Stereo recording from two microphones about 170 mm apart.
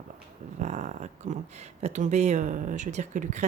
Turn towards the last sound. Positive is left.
turn(degrees=-45)  # may be behind; listen again after turning